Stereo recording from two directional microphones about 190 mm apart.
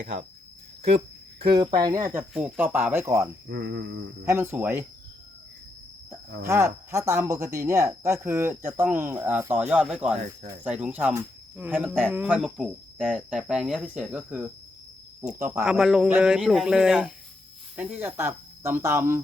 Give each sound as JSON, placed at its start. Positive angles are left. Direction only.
{"t": 1.4, "sound": "speech", "side_deg": -20}
{"t": 2.3, "sound": "speech", "side_deg": -5}
{"t": 3.5, "sound": "a sound", "side_deg": -60}
{"t": 4.3, "sound": "speech", "side_deg": -15}
{"t": 6.1, "sound": "speech", "side_deg": -15}